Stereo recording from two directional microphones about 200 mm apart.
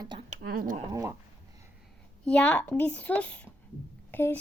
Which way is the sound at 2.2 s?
5° left (ahead or behind).